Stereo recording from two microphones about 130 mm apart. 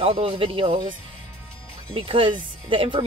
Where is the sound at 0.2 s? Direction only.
45° right (ahead or behind).